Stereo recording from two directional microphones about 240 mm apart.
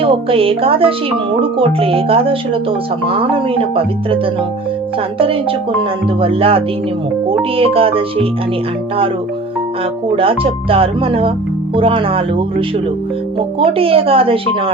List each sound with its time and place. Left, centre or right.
0.0 s speech: right
10.2 s speech: right
13.7 s speech: right